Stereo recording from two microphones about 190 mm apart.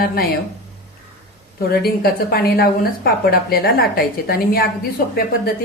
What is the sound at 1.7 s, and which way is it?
A woman's voice, 55° left (ahead or behind).